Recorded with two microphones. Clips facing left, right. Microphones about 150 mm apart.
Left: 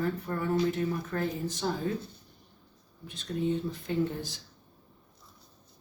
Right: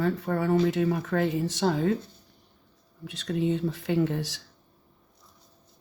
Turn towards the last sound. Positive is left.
turn(degrees=-80)